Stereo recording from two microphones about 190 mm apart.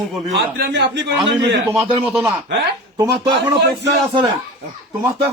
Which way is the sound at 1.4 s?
30° right (ahead or behind).